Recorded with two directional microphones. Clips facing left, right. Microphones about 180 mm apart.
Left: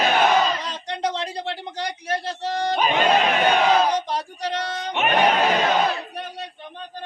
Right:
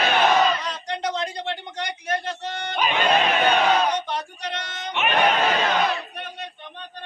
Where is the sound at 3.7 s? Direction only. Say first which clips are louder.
Left 2 dB; 30° left (ahead or behind).